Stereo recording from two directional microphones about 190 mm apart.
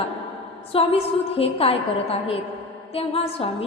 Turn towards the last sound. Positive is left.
turn(degrees=30)  # may be behind; listen again after turning